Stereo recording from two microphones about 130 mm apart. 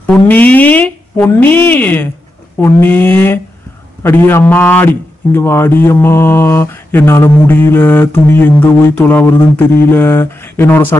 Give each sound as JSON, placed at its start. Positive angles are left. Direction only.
{"t": 0.0, "sound": "a man's voice", "side_deg": 10}